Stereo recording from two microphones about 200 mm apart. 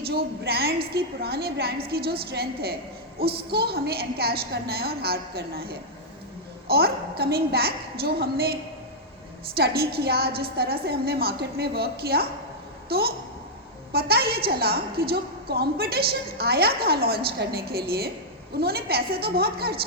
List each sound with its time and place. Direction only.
0.0 s a woman's voice: 50° right (ahead or behind)
9.6 s a woman's voice: 50° right (ahead or behind)